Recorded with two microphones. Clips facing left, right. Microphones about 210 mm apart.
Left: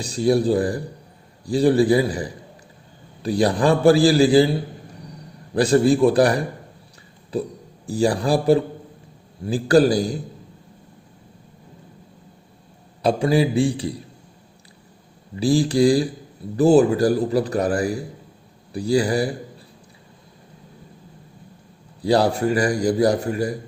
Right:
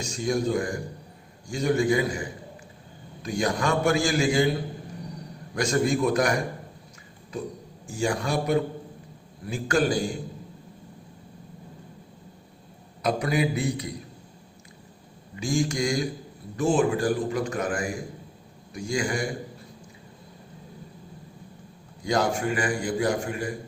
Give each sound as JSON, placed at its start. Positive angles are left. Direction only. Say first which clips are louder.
{"t": 0.0, "sound": "a man's voice", "louder": "left 7 dB", "side_deg": 35}
{"t": 5.5, "sound": "a man's voice", "louder": "left 8 dB", "side_deg": 35}
{"t": 13.0, "sound": "a man's voice", "louder": "left 6 dB", "side_deg": 30}
{"t": 15.4, "sound": "a man's voice", "louder": "left 9 dB", "side_deg": 35}
{"t": 22.0, "sound": "a man's voice", "louder": "left 7 dB", "side_deg": 35}